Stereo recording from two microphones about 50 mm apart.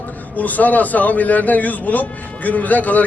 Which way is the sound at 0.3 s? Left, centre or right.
Left.